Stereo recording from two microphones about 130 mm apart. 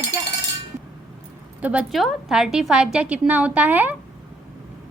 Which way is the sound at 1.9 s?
Centre (ahead or behind).